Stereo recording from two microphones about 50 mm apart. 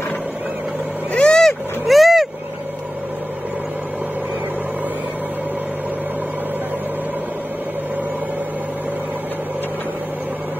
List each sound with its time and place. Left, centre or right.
1.1 s vehicle: left
1.4 s vehicle: centre